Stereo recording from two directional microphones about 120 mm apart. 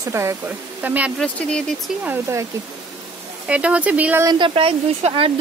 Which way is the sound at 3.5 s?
10° right (ahead or behind).